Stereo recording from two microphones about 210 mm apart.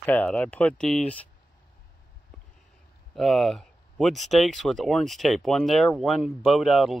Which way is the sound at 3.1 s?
Centre (ahead or behind).